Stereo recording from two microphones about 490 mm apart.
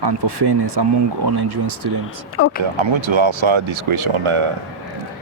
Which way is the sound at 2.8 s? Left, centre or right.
Right.